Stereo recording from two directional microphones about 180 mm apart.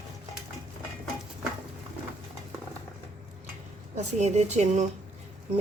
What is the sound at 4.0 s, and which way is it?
Speech, 40° right (ahead or behind).